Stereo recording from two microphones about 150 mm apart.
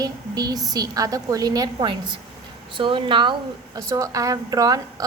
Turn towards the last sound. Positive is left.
turn(degrees=-25)  # may be behind; listen again after turning